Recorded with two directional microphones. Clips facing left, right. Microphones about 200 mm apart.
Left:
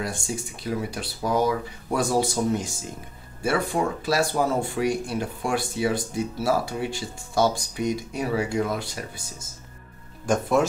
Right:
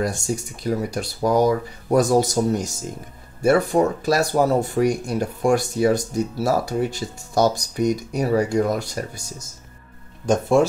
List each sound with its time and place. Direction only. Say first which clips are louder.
0.7 s speech: right 5 dB; 45° right (ahead or behind)
10.2 s speech: right 4 dB; 20° right (ahead or behind)